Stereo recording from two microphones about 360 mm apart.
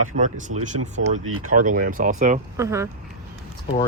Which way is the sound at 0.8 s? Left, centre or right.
Right.